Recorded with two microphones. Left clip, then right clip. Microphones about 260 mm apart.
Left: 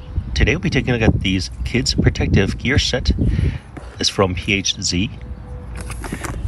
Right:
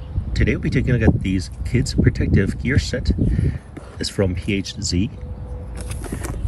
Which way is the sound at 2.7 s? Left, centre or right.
Centre.